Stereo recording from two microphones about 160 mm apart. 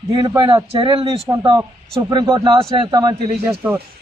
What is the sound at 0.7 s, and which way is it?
A man's voice, 35° right (ahead or behind).